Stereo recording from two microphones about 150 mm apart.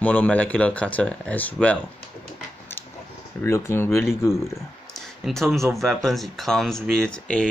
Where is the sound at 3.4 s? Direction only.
15° left (ahead or behind).